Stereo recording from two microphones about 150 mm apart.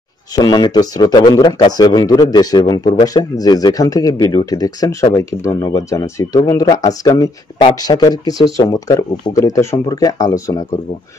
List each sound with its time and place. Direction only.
0.4 s a man's voice: 25° left (ahead or behind)